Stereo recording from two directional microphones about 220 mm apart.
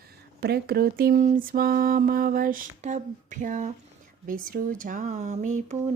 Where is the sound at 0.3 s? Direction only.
45° right (ahead or behind).